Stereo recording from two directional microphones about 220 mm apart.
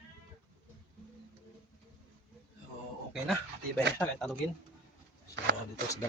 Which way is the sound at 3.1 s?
Centre (ahead or behind).